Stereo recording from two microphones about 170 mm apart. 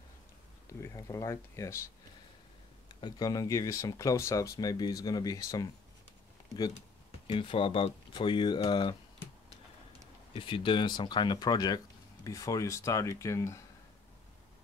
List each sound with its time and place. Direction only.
0.7 s speech: 15° left (ahead or behind)
3.0 s speech: 20° left (ahead or behind)
7.2 s speech: 30° left (ahead or behind)
10.3 s speech: 30° left (ahead or behind)